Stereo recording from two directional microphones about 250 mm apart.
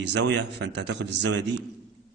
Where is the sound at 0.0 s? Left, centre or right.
Right.